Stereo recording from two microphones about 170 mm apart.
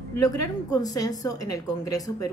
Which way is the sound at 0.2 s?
20° left (ahead or behind).